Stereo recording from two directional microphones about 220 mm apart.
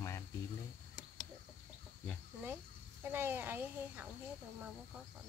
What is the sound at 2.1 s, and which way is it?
Speech, 5° right (ahead or behind).